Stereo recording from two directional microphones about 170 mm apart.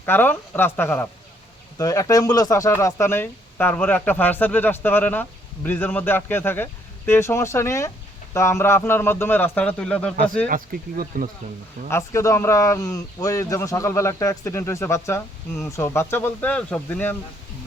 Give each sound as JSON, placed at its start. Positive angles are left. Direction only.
{"t": 0.0, "sound": "speech", "side_deg": 10}
{"t": 10.5, "sound": "speech", "side_deg": -55}
{"t": 11.9, "sound": "speech", "side_deg": 15}